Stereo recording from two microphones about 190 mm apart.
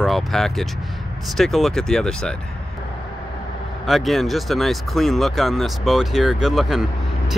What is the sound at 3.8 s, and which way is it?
Speech, centre (ahead or behind).